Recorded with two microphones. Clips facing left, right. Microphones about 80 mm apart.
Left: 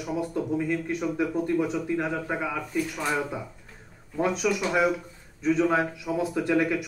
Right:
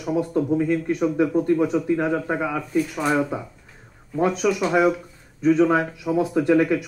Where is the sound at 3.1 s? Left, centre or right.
Right.